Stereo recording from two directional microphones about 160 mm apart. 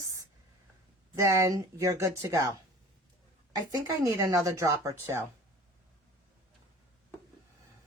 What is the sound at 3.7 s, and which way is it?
Speech, 20° right (ahead or behind).